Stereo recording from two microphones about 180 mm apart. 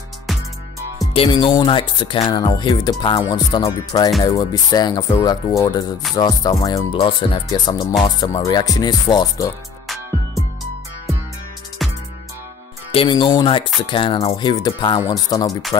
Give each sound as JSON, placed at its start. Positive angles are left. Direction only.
{"t": 0.3, "sound": "music", "side_deg": 0}
{"t": 1.1, "sound": "speech", "side_deg": 30}
{"t": 11.8, "sound": "music", "side_deg": 0}
{"t": 12.9, "sound": "speech", "side_deg": 30}